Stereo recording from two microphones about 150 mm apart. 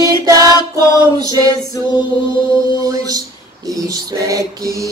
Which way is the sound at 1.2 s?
25° right (ahead or behind).